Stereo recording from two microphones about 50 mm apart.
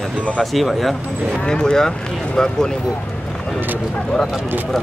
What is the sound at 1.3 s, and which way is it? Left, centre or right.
Speech, centre.